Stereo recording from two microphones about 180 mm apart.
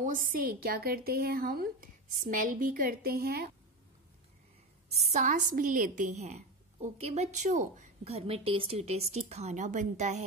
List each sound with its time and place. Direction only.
0.0 s a woman's voice: 50° right (ahead or behind)
4.9 s a woman's voice: 40° right (ahead or behind)